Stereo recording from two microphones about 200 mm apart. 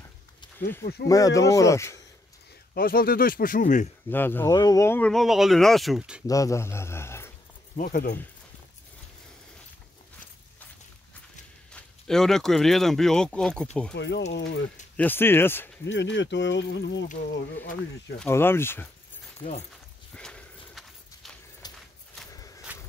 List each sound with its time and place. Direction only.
1.0 s speech: 15° left (ahead or behind)
2.7 s speech: 45° left (ahead or behind)
4.1 s speech: 10° left (ahead or behind)
6.2 s speech: 15° left (ahead or behind)
7.7 s speech: 45° left (ahead or behind)
11.7 s speech: centre (ahead or behind)
13.9 s speech: 60° left (ahead or behind)
15.0 s speech: 10° left (ahead or behind)
15.8 s speech: 65° left (ahead or behind)
18.2 s speech: 10° left (ahead or behind)
20.2 s horse: 5° left (ahead or behind)
21.6 s a sound: 20° left (ahead or behind)
22.7 s a sound: 10° right (ahead or behind)